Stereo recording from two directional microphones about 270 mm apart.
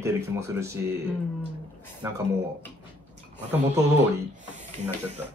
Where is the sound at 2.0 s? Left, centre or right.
Centre.